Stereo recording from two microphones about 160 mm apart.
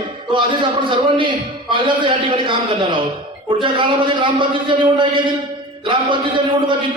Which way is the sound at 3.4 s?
30° right (ahead or behind).